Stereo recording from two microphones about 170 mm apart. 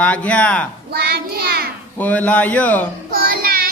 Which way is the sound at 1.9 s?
10° left (ahead or behind).